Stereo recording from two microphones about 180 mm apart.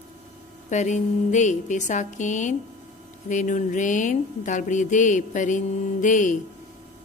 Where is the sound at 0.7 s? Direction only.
40° left (ahead or behind).